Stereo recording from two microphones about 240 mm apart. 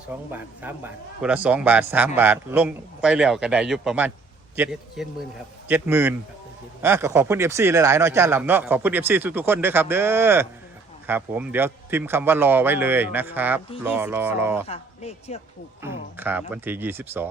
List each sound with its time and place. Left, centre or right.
0.3 s a man's voice: centre
14.7 s a man's voice: left
15.8 s speech: centre